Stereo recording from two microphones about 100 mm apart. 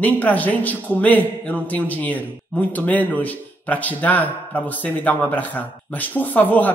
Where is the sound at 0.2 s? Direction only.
15° left (ahead or behind).